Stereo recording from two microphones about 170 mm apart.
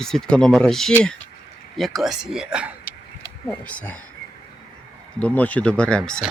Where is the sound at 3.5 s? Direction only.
10° left (ahead or behind).